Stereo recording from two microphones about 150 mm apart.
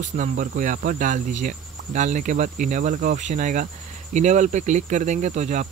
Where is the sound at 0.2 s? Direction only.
60° right (ahead or behind).